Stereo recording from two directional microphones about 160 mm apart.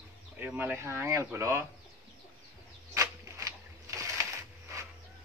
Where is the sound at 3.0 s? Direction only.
20° right (ahead or behind).